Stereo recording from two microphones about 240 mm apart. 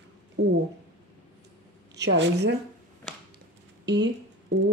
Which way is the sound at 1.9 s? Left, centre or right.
Right.